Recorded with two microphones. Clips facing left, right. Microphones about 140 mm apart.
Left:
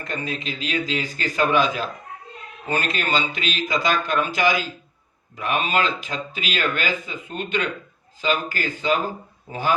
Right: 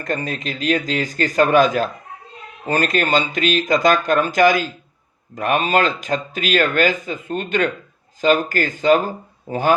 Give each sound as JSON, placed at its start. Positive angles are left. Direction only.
{"t": 0.0, "sound": "speech", "side_deg": -45}